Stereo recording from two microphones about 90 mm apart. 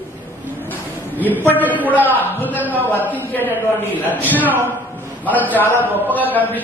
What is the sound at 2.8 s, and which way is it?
Speech, 20° left (ahead or behind).